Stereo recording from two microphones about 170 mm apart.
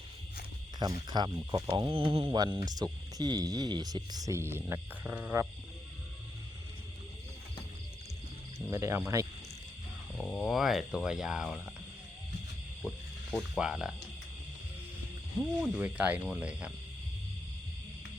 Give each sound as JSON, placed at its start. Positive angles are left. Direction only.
{"t": 1.1, "sound": "speech", "side_deg": -25}
{"t": 8.5, "sound": "speech", "side_deg": -15}
{"t": 10.2, "sound": "speech", "side_deg": 5}
{"t": 12.8, "sound": "snake", "side_deg": -15}
{"t": 13.3, "sound": "speech", "side_deg": -5}
{"t": 15.8, "sound": "speech", "side_deg": -10}